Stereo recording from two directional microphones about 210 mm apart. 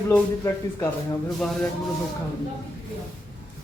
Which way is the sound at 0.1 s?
10° left (ahead or behind).